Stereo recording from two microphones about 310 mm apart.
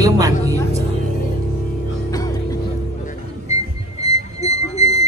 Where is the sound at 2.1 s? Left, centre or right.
Centre.